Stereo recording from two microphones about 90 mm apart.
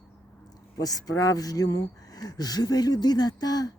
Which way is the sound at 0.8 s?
45° left (ahead or behind).